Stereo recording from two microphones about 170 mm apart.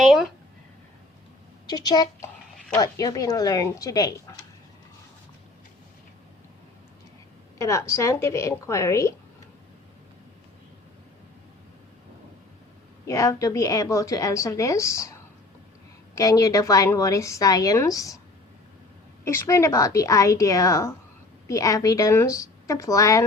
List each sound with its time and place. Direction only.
0.0 s a sound: centre (ahead or behind)
1.6 s a woman's voice: 25° left (ahead or behind)
7.6 s a woman's voice: 15° left (ahead or behind)
13.1 s a woman's voice: 20° left (ahead or behind)
16.1 s a woman's voice: 20° left (ahead or behind)
19.2 s a woman's voice: 15° left (ahead or behind)